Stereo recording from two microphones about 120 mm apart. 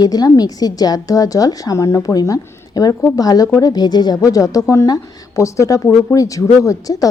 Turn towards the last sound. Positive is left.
turn(degrees=30)  # may be behind; listen again after turning